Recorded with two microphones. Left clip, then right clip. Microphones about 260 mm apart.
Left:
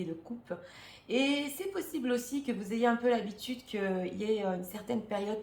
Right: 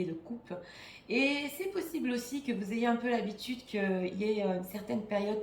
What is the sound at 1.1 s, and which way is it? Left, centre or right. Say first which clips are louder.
Speech: even; centre.